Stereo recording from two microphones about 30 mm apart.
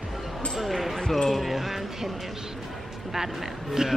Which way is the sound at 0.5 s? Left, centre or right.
Centre.